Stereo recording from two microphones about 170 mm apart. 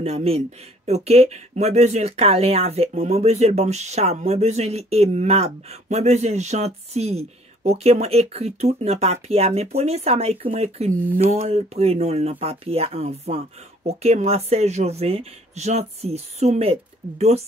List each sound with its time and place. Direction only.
0.0 s speech: 35° right (ahead or behind)